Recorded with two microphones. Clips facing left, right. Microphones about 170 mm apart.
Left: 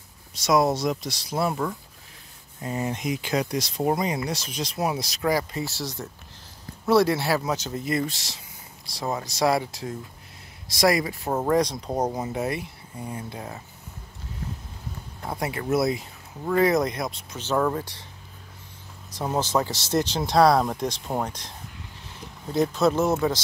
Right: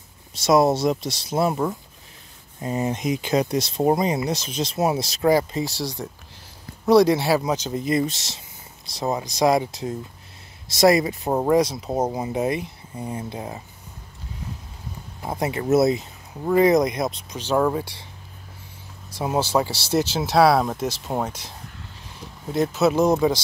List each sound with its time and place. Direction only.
0.3 s speech: 25° right (ahead or behind)
15.2 s speech: 20° right (ahead or behind)
19.0 s speech: 10° right (ahead or behind)